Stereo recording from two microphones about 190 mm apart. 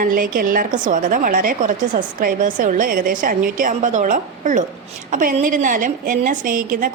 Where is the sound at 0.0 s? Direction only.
45° right (ahead or behind).